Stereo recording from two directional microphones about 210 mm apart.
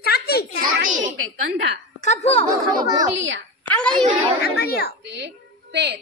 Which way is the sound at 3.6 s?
5° left (ahead or behind).